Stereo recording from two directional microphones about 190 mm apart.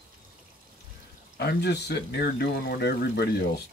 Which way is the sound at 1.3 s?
60° left (ahead or behind).